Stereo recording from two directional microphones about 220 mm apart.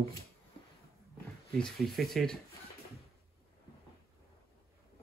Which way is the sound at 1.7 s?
Centre (ahead or behind).